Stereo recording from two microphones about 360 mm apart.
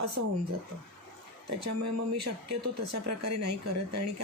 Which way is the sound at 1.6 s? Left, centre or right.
Right.